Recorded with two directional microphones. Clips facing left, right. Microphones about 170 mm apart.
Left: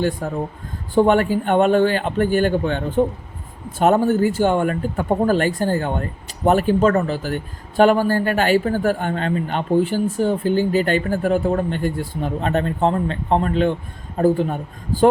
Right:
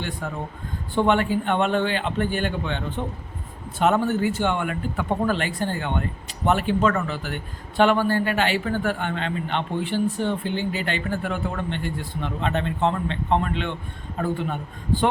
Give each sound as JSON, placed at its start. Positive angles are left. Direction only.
{"t": 0.2, "sound": "a man's voice", "side_deg": 40}